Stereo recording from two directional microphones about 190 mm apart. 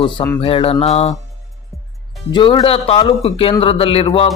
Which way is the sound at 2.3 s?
25° left (ahead or behind).